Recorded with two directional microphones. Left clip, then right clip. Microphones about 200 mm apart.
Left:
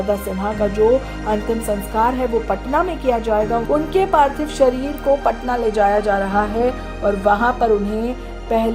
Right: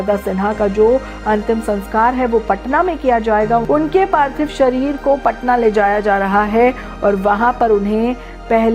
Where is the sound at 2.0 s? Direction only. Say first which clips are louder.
Right 4 dB; 25° right (ahead or behind).